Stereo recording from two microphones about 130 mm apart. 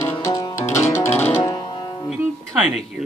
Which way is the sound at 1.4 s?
35° left (ahead or behind).